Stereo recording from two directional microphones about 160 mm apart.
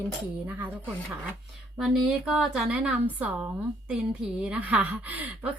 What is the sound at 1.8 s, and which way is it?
A woman's voice, 5° right (ahead or behind).